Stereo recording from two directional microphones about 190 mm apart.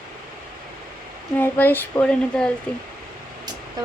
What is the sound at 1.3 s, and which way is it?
Speech, 10° left (ahead or behind).